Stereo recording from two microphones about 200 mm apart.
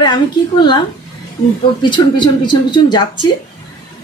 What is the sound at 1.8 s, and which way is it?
Speech, 25° left (ahead or behind).